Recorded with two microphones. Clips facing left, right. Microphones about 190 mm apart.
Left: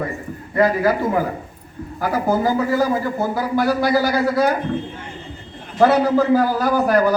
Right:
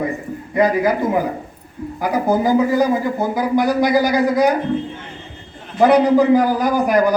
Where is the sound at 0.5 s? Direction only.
15° right (ahead or behind).